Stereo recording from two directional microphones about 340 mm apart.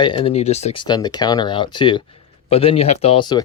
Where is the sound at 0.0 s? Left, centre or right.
Centre.